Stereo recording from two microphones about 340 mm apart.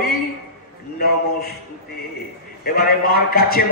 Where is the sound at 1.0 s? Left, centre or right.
Left.